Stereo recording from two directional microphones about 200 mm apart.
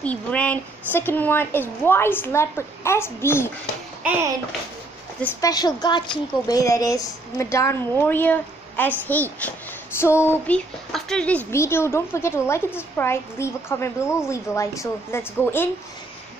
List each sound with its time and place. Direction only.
0.0 s a woman's voice: 5° left (ahead or behind)
4.0 s a child's voice: 10° right (ahead or behind)
5.2 s a woman's voice: 20° left (ahead or behind)